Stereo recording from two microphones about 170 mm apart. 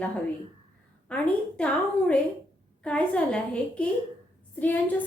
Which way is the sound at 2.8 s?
5° left (ahead or behind).